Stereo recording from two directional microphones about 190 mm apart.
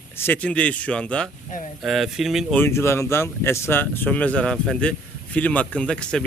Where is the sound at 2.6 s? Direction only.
15° left (ahead or behind).